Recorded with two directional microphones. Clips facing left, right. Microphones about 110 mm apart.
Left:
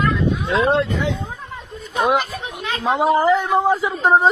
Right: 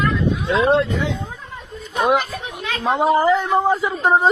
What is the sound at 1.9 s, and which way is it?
Speech, centre (ahead or behind).